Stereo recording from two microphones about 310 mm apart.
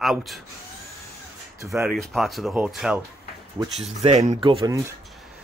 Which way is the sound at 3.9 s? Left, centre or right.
Right.